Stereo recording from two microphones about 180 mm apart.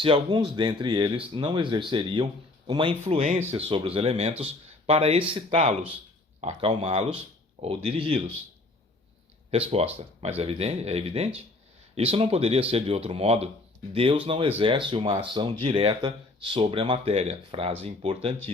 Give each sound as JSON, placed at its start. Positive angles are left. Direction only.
{"t": 0.0, "sound": "speech", "side_deg": -25}
{"t": 3.2, "sound": "speech", "side_deg": -40}
{"t": 9.5, "sound": "speech", "side_deg": -35}